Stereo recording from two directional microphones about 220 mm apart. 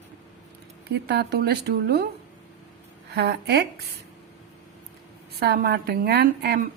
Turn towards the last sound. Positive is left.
turn(degrees=-45)  # may be behind; listen again after turning